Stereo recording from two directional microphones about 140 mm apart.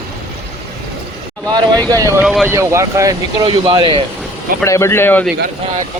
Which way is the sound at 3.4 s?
35° right (ahead or behind).